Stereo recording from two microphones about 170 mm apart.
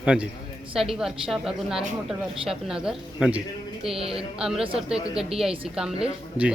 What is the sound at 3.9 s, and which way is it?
Speech, 35° right (ahead or behind).